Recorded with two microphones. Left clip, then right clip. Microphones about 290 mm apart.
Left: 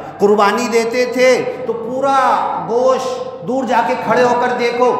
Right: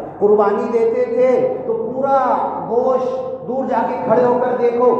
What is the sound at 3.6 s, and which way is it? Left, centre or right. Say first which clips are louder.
Speech: left 3 dB; left.